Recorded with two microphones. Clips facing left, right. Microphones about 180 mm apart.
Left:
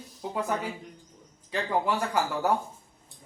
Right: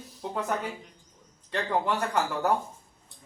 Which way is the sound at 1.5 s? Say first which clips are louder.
Even; 5° left (ahead or behind).